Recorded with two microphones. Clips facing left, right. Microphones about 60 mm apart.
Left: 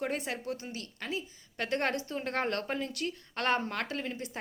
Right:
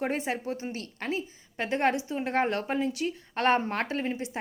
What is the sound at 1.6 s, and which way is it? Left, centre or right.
Speech, centre.